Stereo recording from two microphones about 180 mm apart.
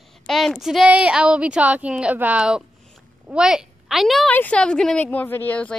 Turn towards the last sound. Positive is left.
turn(degrees=10)  # may be behind; listen again after turning